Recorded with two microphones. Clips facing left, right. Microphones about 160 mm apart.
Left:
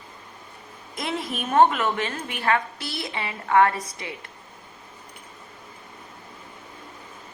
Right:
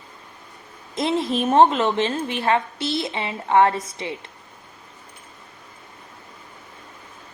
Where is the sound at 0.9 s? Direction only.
25° right (ahead or behind).